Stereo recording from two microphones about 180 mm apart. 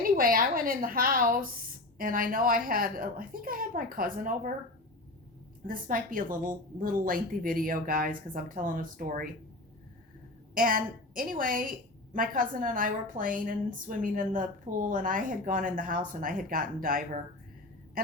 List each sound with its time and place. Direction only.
0.0 s a woman's voice: 50° right (ahead or behind)
5.6 s a woman's voice: 50° right (ahead or behind)
10.5 s a woman's voice: 50° right (ahead or behind)